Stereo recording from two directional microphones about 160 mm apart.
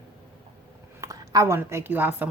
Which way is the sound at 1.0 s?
20° right (ahead or behind).